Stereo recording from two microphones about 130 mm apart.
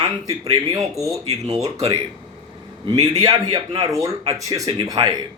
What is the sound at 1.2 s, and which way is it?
Speech, 55° right (ahead or behind).